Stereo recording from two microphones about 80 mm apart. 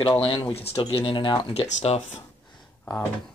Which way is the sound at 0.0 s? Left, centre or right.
Left.